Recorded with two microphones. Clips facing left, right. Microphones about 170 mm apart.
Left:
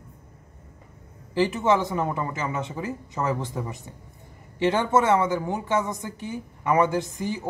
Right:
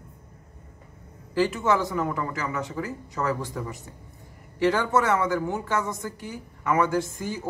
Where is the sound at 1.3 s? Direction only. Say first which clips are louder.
Left 1 dB; 20° left (ahead or behind).